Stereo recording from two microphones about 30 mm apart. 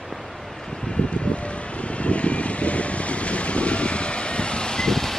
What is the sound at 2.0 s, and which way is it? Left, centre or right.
Vehicle, left.